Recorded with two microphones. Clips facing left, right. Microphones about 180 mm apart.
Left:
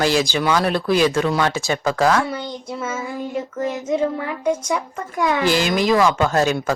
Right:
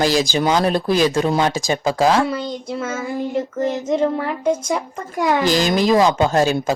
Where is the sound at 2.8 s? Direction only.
70° right (ahead or behind).